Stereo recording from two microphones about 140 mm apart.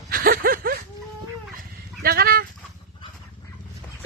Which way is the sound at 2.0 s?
90° right.